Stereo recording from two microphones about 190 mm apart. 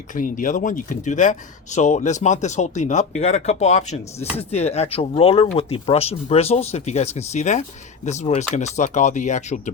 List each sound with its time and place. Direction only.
0.1 s speech: 45° left (ahead or behind)